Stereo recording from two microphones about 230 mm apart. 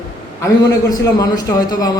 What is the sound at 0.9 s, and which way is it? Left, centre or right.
A man's voice, centre.